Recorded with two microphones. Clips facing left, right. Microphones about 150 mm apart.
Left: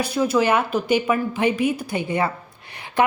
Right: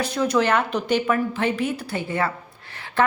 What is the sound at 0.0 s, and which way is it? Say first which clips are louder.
A woman's voice: left 1 dB; 10° left (ahead or behind).